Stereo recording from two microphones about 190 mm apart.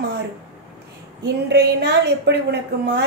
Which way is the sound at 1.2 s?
60° right (ahead or behind).